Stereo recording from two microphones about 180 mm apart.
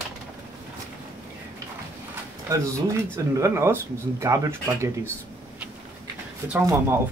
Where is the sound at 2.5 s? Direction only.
15° right (ahead or behind).